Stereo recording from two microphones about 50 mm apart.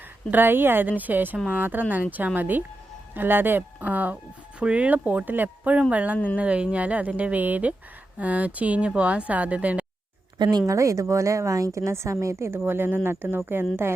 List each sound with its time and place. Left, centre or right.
0.3 s speech: right
10.8 s a woman's voice: right